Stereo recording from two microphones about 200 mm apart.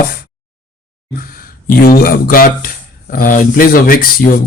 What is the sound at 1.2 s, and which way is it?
A man's voice, 45° left (ahead or behind).